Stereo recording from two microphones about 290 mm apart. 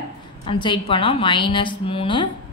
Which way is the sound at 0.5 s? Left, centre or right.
Centre.